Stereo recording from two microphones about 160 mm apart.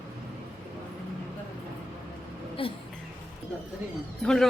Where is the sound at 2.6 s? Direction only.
35° left (ahead or behind).